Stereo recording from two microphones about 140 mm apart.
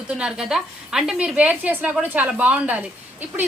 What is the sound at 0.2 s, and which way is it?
A woman's voice, 5° right (ahead or behind).